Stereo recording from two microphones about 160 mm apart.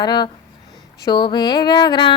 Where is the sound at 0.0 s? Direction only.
25° left (ahead or behind).